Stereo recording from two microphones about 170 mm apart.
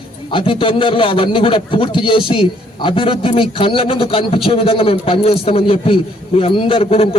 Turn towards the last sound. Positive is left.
turn(degrees=35)  # may be behind; listen again after turning